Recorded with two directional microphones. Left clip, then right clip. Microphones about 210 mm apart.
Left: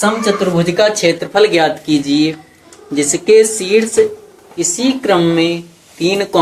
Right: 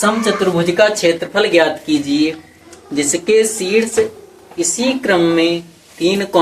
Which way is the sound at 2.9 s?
40° left (ahead or behind).